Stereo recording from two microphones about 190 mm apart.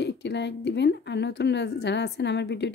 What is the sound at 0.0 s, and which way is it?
A woman's voice, 65° left (ahead or behind).